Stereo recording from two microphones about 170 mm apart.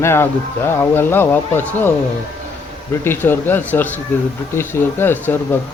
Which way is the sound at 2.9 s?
15° left (ahead or behind).